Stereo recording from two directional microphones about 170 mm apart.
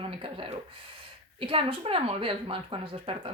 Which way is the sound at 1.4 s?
30° right (ahead or behind).